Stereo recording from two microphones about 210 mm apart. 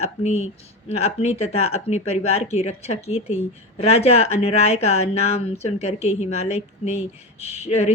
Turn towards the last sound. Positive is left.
turn(degrees=30)  # may be behind; listen again after turning